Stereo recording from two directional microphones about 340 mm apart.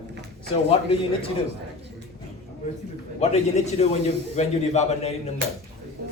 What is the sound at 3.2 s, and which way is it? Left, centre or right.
A man's voice, centre.